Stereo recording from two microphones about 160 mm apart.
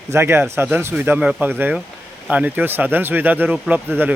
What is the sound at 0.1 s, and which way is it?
Speech, 15° right (ahead or behind).